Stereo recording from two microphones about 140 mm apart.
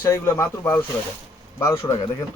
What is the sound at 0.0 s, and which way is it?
Speech, 20° left (ahead or behind).